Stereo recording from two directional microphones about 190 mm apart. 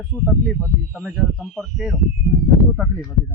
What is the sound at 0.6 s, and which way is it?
Speech, 10° right (ahead or behind).